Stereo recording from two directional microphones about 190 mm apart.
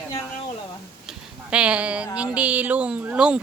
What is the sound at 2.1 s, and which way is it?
Speech, 5° right (ahead or behind).